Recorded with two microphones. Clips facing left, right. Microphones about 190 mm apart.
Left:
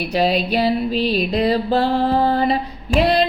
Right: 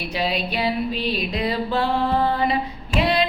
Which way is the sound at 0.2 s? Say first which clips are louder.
Left 6 dB; 40° left (ahead or behind).